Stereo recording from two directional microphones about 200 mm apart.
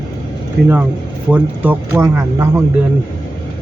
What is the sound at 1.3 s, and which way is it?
Speech, 10° right (ahead or behind).